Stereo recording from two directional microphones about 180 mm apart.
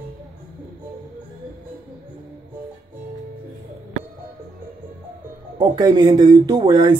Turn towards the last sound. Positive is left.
turn(degrees=-25)  # may be behind; listen again after turning